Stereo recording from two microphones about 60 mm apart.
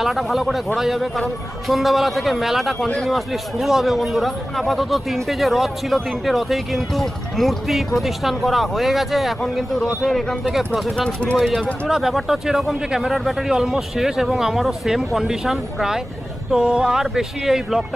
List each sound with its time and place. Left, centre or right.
0.0 s speech: centre
11.0 s speech: centre
11.3 s speech: centre